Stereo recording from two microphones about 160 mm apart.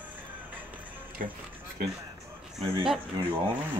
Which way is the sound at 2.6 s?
35° right (ahead or behind).